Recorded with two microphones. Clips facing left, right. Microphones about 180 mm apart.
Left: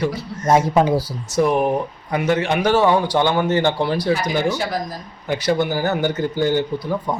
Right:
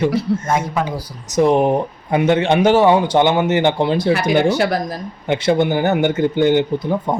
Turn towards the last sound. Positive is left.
turn(degrees=-20)  # may be behind; listen again after turning